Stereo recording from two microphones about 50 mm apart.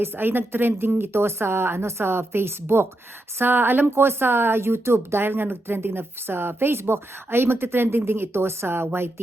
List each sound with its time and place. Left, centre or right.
0.0 s a woman's voice: right